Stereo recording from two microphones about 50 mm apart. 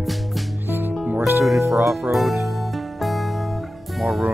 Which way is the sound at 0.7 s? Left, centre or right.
Right.